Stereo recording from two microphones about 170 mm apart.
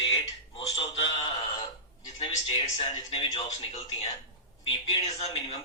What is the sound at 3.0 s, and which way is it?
Speech, 20° left (ahead or behind).